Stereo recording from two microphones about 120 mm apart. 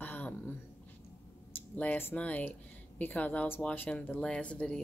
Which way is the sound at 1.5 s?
15° left (ahead or behind).